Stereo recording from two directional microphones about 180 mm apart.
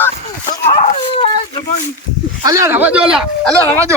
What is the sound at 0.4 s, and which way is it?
Dog, 35° left (ahead or behind).